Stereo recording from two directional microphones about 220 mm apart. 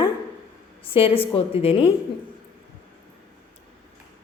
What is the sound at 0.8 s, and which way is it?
A woman's voice, 25° left (ahead or behind).